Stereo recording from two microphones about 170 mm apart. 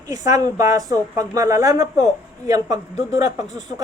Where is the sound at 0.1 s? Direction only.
20° right (ahead or behind).